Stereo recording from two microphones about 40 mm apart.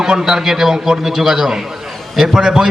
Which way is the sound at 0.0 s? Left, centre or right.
Centre.